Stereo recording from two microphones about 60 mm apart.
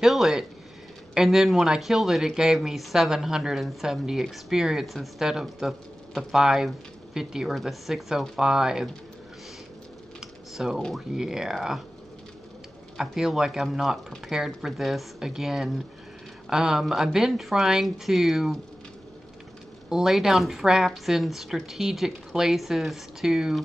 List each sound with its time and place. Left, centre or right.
0.0 s speech: centre
10.2 s typing: centre
11.1 s speech: centre
12.9 s speech: centre
19.9 s speech: centre